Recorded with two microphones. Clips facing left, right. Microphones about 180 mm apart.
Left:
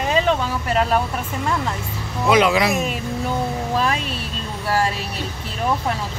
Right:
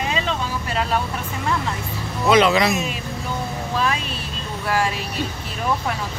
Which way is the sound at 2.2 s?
10° left (ahead or behind).